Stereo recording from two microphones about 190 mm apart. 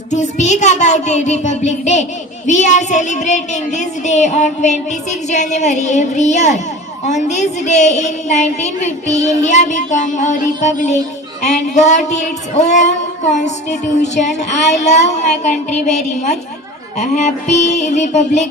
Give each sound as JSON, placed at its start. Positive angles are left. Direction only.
{"t": 0.1, "sound": "a woman's voice", "side_deg": 40}